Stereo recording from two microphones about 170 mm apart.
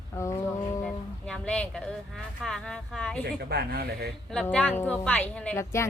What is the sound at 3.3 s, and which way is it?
Speech, 70° right (ahead or behind).